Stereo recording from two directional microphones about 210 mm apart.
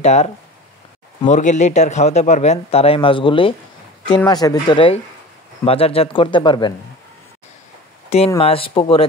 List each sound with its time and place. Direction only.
0.0 s speech: 30° left (ahead or behind)
4.0 s speech: 5° left (ahead or behind)
4.3 s speech: 20° left (ahead or behind)
8.4 s speech: 25° left (ahead or behind)